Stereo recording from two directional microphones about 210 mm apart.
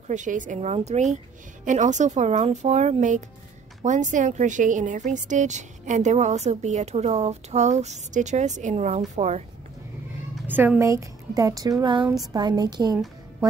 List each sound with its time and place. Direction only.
0.1 s a woman's voice: 35° right (ahead or behind)
10.3 s a woman's voice: 10° right (ahead or behind)